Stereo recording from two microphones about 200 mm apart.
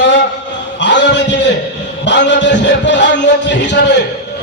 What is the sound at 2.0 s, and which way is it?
Speech, 60° left (ahead or behind).